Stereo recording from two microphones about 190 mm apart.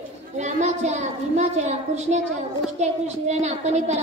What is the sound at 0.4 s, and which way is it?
A woman's voice, 35° right (ahead or behind).